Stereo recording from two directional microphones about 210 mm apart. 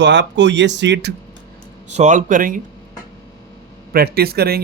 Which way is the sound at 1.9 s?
35° right (ahead or behind).